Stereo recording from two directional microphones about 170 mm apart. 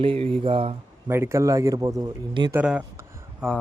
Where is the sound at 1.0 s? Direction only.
15° right (ahead or behind).